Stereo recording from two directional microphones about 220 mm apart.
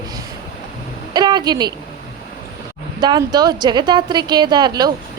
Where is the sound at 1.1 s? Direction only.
20° right (ahead or behind).